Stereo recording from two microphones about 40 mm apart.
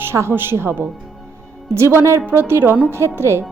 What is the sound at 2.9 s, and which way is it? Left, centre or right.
Speech, right.